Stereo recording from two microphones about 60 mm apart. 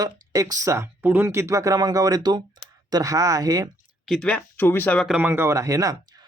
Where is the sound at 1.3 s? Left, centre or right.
Right.